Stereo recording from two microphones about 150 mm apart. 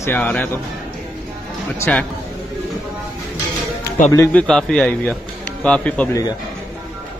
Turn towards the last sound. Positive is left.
turn(degrees=25)  # may be behind; listen again after turning